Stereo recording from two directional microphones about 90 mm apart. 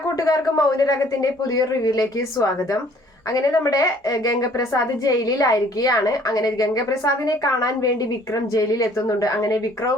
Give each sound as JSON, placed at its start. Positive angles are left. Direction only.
{"t": 0.2, "sound": "a woman's voice", "side_deg": 40}